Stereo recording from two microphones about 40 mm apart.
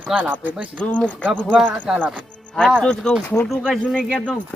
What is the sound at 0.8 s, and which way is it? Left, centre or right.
Speech, left.